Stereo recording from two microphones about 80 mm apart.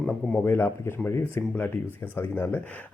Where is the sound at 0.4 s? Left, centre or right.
Left.